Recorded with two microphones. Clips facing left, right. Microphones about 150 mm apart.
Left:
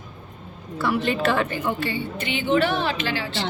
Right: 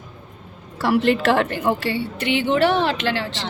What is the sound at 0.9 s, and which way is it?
A woman's voice, 85° right.